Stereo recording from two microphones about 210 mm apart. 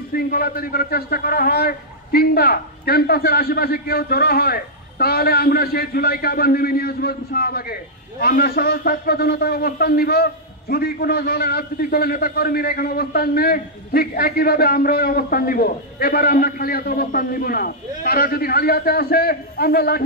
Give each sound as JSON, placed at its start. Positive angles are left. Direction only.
{"t": 0.1, "sound": "a man's voice", "side_deg": 45}